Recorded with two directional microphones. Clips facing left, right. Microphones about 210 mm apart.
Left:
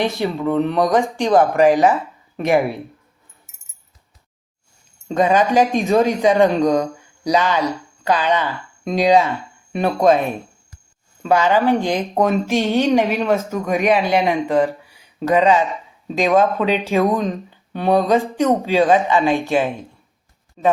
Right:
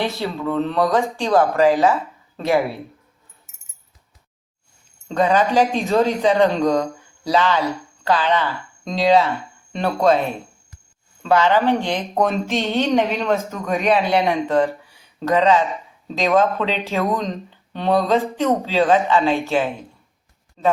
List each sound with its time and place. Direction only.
0.0 s speech: 15° left (ahead or behind)
5.0 s speech: 15° left (ahead or behind)